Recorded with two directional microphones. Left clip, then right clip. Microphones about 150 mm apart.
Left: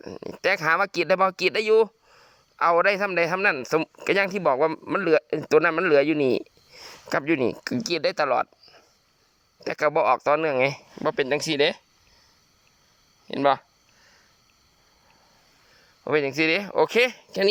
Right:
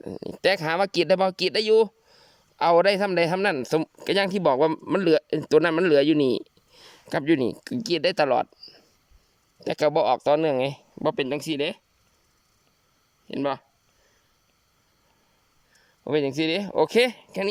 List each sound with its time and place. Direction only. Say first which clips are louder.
0.0 s speech: right 2 dB; 35° right (ahead or behind)
11.3 s speech: left 5 dB; 10° right (ahead or behind)
13.2 s speech: left 6 dB; 5° right (ahead or behind)
16.0 s speech: left 2 dB; 35° right (ahead or behind)